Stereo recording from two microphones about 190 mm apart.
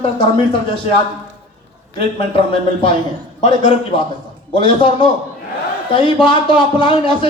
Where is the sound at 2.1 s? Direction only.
25° left (ahead or behind).